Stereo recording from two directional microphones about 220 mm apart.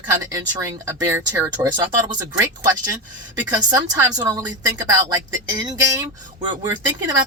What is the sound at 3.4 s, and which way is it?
Speech, 15° right (ahead or behind).